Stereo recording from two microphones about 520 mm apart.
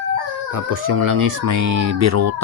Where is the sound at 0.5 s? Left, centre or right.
Right.